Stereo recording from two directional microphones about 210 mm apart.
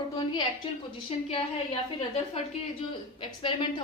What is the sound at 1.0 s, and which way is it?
A woman's voice, 25° left (ahead or behind).